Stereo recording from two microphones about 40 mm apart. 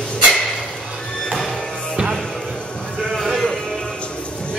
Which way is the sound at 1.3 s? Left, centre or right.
Centre.